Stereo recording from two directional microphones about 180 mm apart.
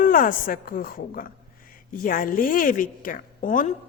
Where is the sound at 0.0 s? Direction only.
50° left (ahead or behind).